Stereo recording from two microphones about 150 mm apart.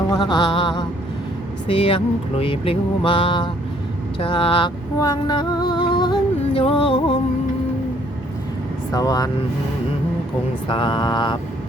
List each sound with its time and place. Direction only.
0.1 s speech: 30° left (ahead or behind)
4.2 s music: 35° left (ahead or behind)
8.9 s speech: 25° left (ahead or behind)
10.7 s speech: 35° left (ahead or behind)